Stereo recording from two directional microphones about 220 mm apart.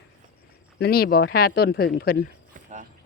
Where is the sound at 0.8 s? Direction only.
45° left (ahead or behind).